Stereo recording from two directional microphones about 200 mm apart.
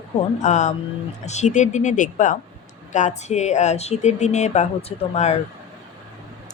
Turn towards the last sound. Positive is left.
turn(degrees=35)  # may be behind; listen again after turning